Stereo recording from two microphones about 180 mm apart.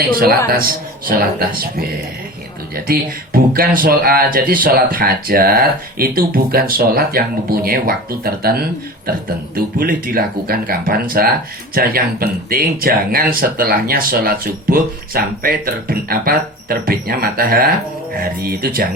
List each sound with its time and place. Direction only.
0.0 s speech: 55° right (ahead or behind)